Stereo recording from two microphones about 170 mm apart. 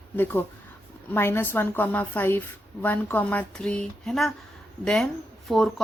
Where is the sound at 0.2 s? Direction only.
10° left (ahead or behind).